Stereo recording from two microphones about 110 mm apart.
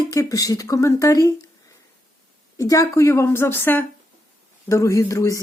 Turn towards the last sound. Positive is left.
turn(degrees=30)  # may be behind; listen again after turning